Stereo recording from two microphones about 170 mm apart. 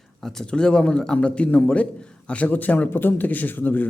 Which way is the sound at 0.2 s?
5° left (ahead or behind).